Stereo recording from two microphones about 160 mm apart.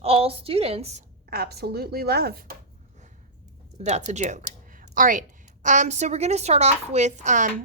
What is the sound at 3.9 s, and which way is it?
A woman's voice, 45° right (ahead or behind).